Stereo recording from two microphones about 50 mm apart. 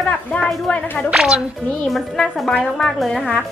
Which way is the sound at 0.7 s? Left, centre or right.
Centre.